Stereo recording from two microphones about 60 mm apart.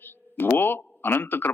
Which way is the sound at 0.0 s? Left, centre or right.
Left.